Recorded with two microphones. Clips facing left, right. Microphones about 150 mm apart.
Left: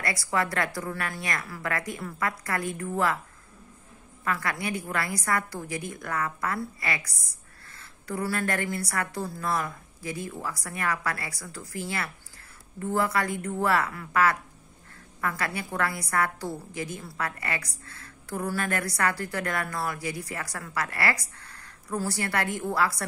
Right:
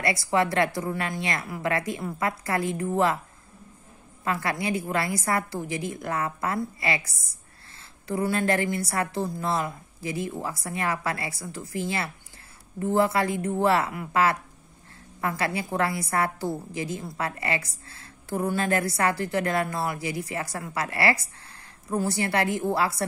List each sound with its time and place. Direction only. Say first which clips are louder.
0.0 s speech: right 4 dB; 25° right (ahead or behind)
4.2 s speech: right 2 dB; 25° right (ahead or behind)